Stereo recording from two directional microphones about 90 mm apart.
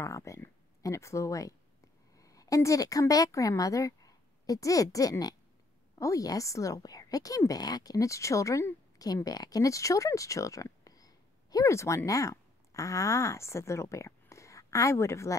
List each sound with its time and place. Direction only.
0.0 s a woman's voice: 35° left (ahead or behind)